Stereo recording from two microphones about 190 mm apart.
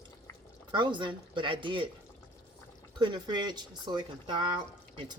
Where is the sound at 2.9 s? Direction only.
25° right (ahead or behind).